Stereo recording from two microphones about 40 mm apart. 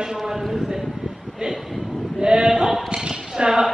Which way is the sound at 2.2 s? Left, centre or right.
Centre.